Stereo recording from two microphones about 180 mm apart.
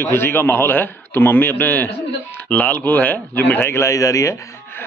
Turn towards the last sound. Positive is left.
turn(degrees=10)  # may be behind; listen again after turning